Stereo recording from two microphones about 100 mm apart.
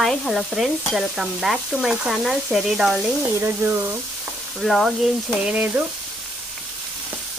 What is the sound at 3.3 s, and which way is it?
Frying, 20° right (ahead or behind).